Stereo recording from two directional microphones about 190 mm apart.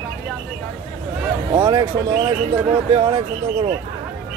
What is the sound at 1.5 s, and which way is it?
Speech, 25° right (ahead or behind).